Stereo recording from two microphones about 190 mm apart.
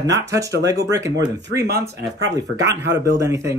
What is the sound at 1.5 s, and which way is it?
Speech, 60° right (ahead or behind).